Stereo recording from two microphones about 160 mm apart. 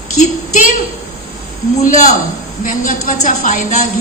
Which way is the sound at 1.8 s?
50° left (ahead or behind).